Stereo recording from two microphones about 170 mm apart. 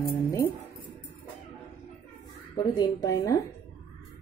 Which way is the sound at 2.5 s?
25° left (ahead or behind).